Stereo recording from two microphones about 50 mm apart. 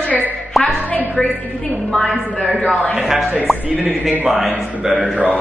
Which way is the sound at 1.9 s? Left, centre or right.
Centre.